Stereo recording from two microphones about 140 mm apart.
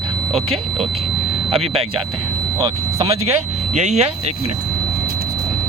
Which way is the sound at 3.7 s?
55° right (ahead or behind).